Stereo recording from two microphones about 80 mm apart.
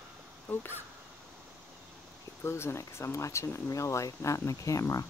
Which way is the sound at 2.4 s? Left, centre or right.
Left.